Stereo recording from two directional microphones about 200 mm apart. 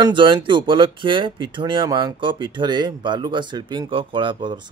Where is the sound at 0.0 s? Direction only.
25° right (ahead or behind).